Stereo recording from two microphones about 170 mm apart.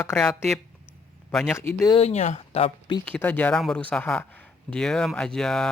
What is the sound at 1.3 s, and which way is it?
Speech, centre (ahead or behind).